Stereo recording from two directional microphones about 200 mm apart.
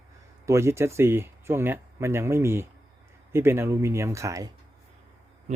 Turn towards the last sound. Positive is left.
turn(degrees=-15)  # may be behind; listen again after turning